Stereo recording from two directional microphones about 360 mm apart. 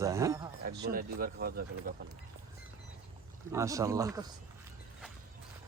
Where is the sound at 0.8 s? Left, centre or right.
Right.